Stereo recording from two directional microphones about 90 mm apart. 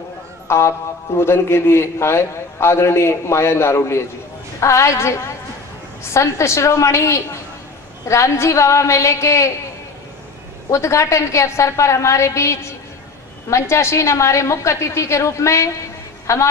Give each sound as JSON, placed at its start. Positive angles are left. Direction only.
{"t": 0.5, "sound": "a man's voice", "side_deg": 30}
{"t": 10.7, "sound": "a woman's voice", "side_deg": 35}